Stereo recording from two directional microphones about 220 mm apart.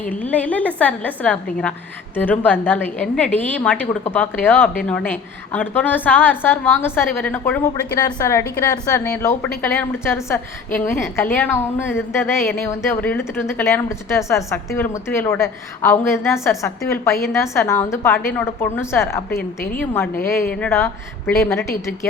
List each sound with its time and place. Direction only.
0.0 s a woman's voice: 5° left (ahead or behind)
19.4 s a woman's voice: 45° left (ahead or behind)
19.8 s a woman's voice: 10° left (ahead or behind)